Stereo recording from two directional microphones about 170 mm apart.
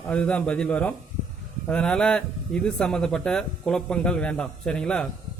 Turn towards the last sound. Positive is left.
turn(degrees=5)  # may be behind; listen again after turning